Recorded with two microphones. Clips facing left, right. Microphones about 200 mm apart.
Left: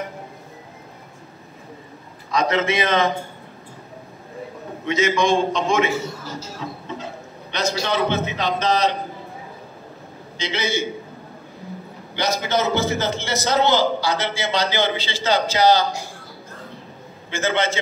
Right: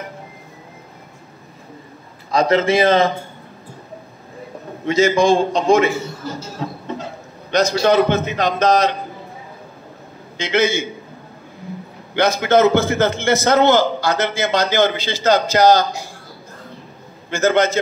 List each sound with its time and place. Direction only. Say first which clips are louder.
2.3 s a man's voice: right 5 dB; 35° right (ahead or behind)
4.8 s a man's voice: right 5 dB; 35° right (ahead or behind)
6.6 s a sound: right 6 dB; 45° right (ahead or behind)
7.5 s a man's voice: right 8 dB; 45° right (ahead or behind)
10.4 s a man's voice: right 8 dB; 50° right (ahead or behind)
12.1 s a man's voice: right 7 dB; 55° right (ahead or behind)
17.3 s a man's voice: right 6 dB; 40° right (ahead or behind)